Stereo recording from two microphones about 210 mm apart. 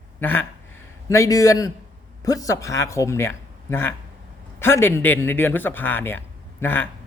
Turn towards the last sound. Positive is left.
turn(degrees=10)  # may be behind; listen again after turning